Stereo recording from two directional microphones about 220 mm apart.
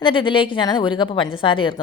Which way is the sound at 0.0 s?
25° left (ahead or behind).